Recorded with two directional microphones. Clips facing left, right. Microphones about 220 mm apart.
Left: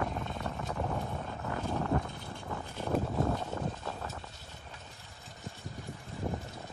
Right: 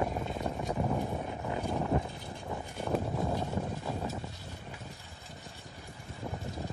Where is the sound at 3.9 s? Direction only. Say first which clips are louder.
Right 5 dB; 15° right (ahead or behind).